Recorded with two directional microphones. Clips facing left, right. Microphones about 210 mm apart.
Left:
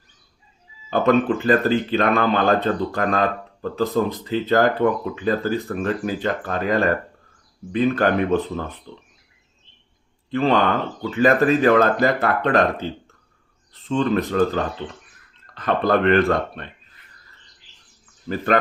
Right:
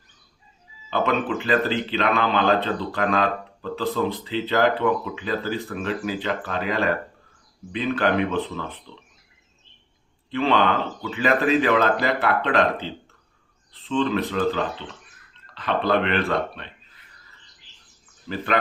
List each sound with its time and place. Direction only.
0.9 s speech: 45° left (ahead or behind)
10.3 s speech: 45° left (ahead or behind)
18.3 s speech: 45° left (ahead or behind)